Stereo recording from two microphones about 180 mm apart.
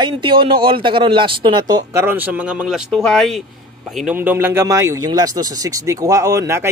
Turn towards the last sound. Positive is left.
turn(degrees=-15)  # may be behind; listen again after turning